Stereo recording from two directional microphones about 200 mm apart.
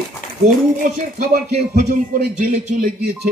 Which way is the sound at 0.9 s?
45° right (ahead or behind).